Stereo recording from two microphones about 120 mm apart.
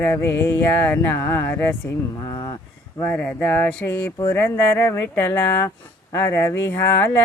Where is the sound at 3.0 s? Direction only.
15° left (ahead or behind).